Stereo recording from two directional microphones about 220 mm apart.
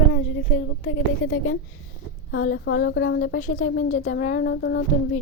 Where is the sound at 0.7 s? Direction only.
55° left (ahead or behind).